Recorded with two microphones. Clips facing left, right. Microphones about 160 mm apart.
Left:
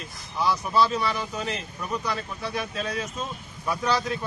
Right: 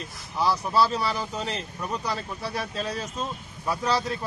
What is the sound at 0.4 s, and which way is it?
Speech, 35° right (ahead or behind).